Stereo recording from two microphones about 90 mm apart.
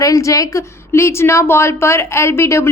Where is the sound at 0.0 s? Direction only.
40° left (ahead or behind).